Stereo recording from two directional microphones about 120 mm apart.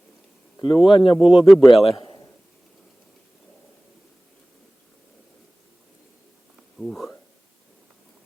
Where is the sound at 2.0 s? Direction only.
35° left (ahead or behind).